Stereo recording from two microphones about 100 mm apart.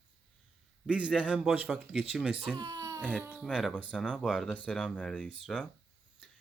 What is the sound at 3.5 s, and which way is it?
Speech, 5° left (ahead or behind).